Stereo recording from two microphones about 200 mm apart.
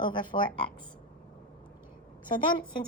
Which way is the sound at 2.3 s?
25° left (ahead or behind).